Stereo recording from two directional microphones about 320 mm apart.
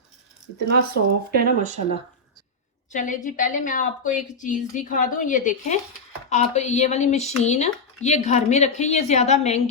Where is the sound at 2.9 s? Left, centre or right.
Left.